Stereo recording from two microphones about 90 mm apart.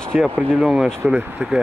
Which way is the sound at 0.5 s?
10° right (ahead or behind).